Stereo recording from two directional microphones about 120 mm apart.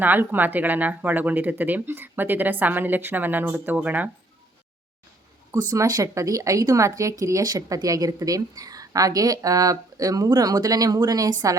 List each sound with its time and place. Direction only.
0.0 s speech: 15° right (ahead or behind)
5.5 s a woman's voice: 30° right (ahead or behind)